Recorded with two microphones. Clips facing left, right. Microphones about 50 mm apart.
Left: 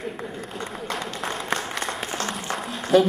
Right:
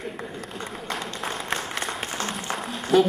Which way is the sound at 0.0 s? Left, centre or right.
Centre.